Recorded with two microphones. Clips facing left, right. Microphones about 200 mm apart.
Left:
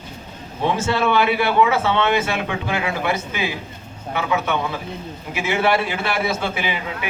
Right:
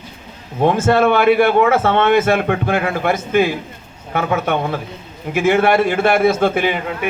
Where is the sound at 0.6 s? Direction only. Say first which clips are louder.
Right 7 dB; 50° right (ahead or behind).